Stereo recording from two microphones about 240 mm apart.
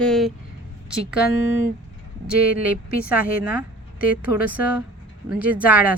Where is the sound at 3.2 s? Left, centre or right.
Left.